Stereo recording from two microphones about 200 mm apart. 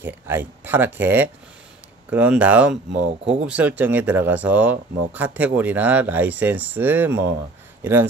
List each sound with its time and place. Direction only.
0.0 s speech: 10° right (ahead or behind)
2.9 s speech: 40° right (ahead or behind)
3.4 s speech: 5° right (ahead or behind)